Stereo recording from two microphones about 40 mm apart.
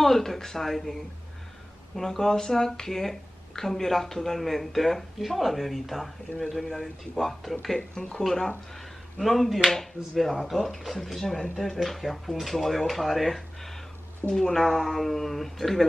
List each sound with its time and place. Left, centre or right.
0.0 s speech: centre
7.9 s speech: left
9.2 s speech: centre
14.3 s speech: centre